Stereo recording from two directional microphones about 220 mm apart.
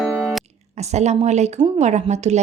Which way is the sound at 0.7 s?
30° right (ahead or behind).